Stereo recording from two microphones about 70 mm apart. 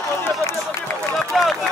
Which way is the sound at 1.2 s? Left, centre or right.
Centre.